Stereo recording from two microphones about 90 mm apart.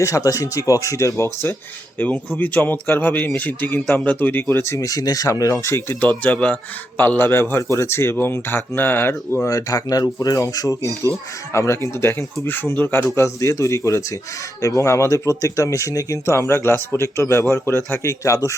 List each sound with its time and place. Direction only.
0.0 s speech: 40° left (ahead or behind)
2.0 s speech: 15° left (ahead or behind); by 6.0 s 35° left (ahead or behind)
6.0 s speech: 15° left (ahead or behind)
9.5 s speech: 40° left (ahead or behind)